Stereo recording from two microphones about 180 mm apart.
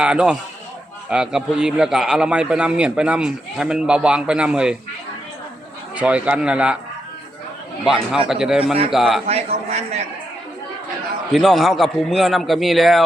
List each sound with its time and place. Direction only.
0.0 s a man's voice: 5° right (ahead or behind)
6.0 s speech: 5° right (ahead or behind)
7.9 s a man's voice: 5° right (ahead or behind)
9.2 s a man's voice: 35° right (ahead or behind)
11.3 s a man's voice: centre (ahead or behind)